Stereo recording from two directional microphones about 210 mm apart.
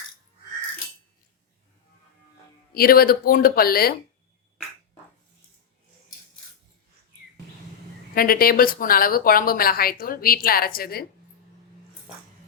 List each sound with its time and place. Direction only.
2.7 s a woman's voice: 45° left (ahead or behind)
8.1 s a woman's voice: 45° left (ahead or behind)